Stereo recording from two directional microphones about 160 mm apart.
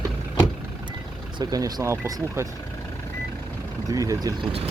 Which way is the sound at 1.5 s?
25° right (ahead or behind).